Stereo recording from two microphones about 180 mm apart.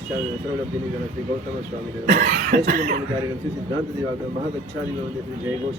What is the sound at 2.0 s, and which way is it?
Speech, 50° right (ahead or behind).